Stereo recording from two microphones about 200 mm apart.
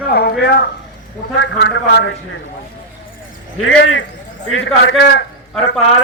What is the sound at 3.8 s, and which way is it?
Speech, 65° left (ahead or behind).